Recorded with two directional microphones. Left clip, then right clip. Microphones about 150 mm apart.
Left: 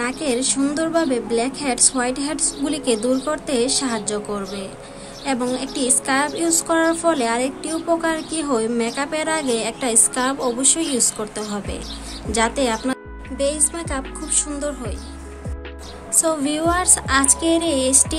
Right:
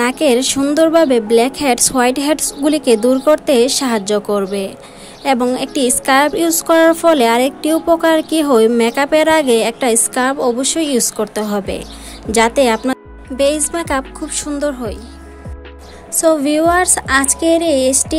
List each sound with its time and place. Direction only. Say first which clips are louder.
0.0 s a woman's voice: right 9 dB; 55° right (ahead or behind)
16.2 s a woman's voice: right 8 dB; 45° right (ahead or behind)